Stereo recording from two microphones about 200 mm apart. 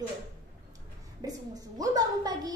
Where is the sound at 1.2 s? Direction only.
20° right (ahead or behind).